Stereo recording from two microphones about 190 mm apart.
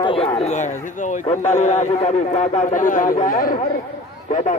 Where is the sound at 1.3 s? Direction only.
40° left (ahead or behind).